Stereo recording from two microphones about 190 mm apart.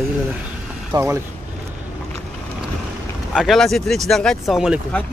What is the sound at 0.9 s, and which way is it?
Speech, 15° right (ahead or behind).